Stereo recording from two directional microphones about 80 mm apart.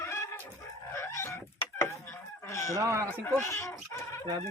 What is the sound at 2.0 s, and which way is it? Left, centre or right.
Goose, left.